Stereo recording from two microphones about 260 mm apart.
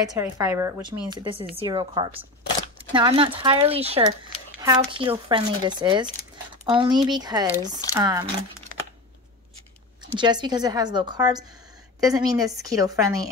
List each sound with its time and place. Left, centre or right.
0.1 s speech: centre
10.1 s speech: centre